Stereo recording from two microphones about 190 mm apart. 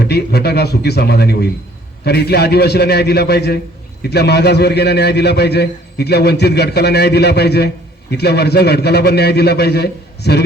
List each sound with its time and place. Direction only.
0.0 s a man's voice: 55° left (ahead or behind)